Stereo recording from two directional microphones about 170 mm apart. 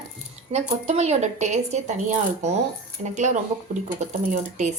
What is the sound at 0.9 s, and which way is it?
Speech, 40° right (ahead or behind).